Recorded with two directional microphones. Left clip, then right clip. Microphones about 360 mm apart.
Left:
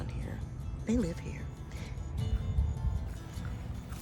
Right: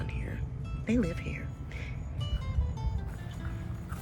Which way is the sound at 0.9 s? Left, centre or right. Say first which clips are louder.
Right 2 dB; centre.